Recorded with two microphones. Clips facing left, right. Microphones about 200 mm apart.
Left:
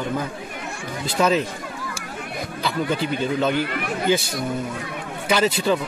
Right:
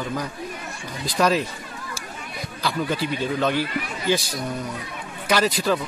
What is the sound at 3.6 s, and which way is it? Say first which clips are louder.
Speech: left 3 dB; 60° left (ahead or behind).